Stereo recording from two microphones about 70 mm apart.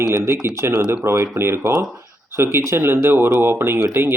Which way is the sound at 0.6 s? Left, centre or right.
Right.